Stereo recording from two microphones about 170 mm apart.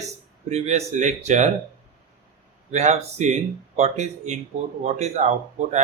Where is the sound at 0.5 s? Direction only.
40° right (ahead or behind).